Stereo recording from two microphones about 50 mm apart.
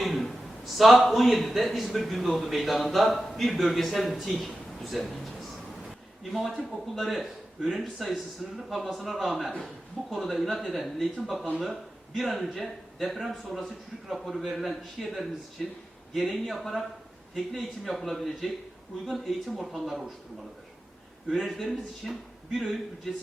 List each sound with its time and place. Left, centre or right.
0.0 s a man's voice: centre
6.6 s a man's voice: centre
21.3 s a man's voice: centre